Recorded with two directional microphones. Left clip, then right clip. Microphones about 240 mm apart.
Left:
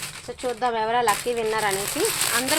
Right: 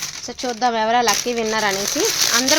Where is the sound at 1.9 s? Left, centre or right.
Centre.